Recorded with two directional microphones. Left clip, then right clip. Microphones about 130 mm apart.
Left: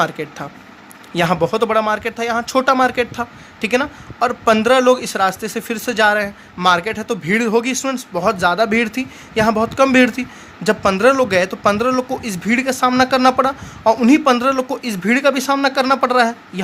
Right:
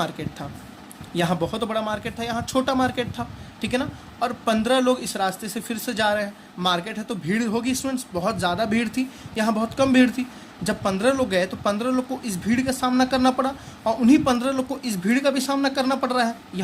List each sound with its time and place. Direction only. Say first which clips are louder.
0.0 s speech: left 9 dB; 45° left (ahead or behind)